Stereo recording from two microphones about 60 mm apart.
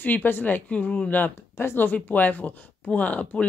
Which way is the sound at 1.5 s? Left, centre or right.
Left.